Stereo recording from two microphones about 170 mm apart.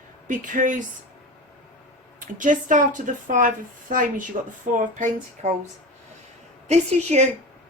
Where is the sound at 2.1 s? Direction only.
50° right (ahead or behind).